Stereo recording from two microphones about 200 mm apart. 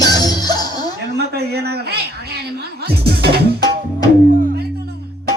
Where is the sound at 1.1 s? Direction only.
55° right (ahead or behind).